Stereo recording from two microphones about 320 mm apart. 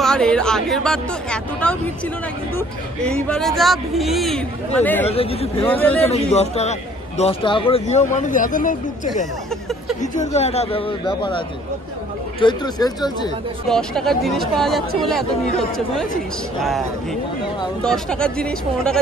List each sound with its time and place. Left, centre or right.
0.0 s speech: centre
3.3 s speech: centre
5.1 s speech: centre
5.7 s speech: centre
6.0 s a man's voice: centre
10.2 s speech: centre
13.7 s speech: centre
16.6 s speech: centre